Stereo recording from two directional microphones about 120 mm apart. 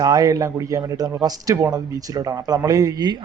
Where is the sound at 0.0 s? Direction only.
30° right (ahead or behind).